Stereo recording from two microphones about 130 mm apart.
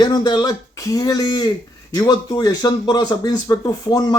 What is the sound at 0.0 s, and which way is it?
Speech, 35° left (ahead or behind).